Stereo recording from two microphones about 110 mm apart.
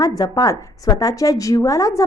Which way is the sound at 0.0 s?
35° left (ahead or behind).